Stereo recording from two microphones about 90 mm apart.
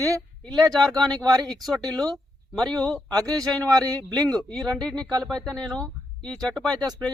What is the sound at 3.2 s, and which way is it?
Speech, 40° right (ahead or behind).